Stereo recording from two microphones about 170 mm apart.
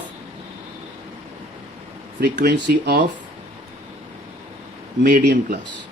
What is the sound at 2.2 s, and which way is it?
Speech, 60° right (ahead or behind).